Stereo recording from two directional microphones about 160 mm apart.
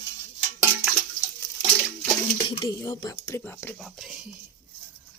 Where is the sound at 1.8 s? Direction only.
5° left (ahead or behind).